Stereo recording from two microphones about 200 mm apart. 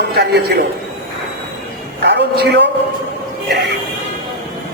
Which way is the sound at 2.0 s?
60° right (ahead or behind).